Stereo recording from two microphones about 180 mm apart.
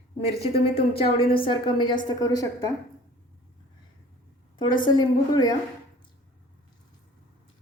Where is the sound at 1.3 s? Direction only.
30° left (ahead or behind).